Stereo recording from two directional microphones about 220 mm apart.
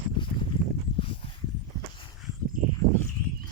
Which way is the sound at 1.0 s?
25° left (ahead or behind).